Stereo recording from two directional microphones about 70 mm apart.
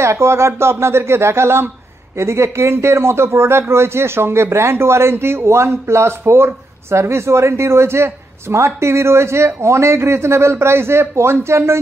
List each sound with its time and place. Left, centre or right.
0.0 s speech: right